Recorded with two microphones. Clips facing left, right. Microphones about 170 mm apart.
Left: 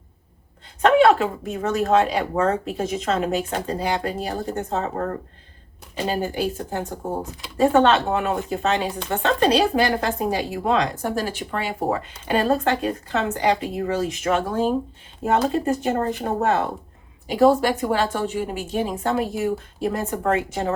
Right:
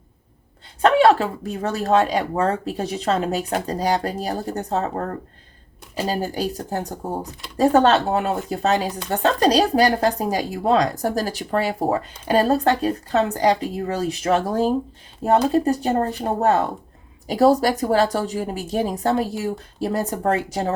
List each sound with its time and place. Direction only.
0.8 s speech: 35° right (ahead or behind)
6.1 s speech: 35° right (ahead or behind)